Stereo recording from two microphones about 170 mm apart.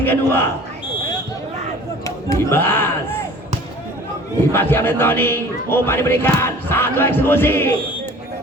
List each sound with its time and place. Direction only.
0.0 s speech: 10° left (ahead or behind)
2.0 s speech: 15° left (ahead or behind)
4.5 s speech: 15° left (ahead or behind)